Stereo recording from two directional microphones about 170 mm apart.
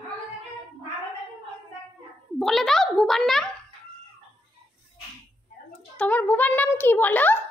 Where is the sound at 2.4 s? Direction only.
Centre (ahead or behind).